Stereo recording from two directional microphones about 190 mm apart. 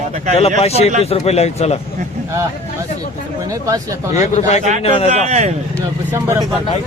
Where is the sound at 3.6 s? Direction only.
15° right (ahead or behind).